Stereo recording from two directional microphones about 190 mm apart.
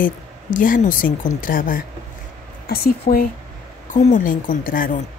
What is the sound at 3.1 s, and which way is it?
Speech, 40° left (ahead or behind).